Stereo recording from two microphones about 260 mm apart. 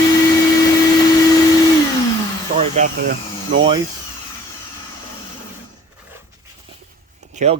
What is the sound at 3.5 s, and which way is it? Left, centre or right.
Speech, centre.